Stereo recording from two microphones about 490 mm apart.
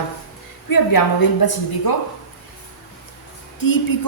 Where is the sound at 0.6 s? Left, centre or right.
Left.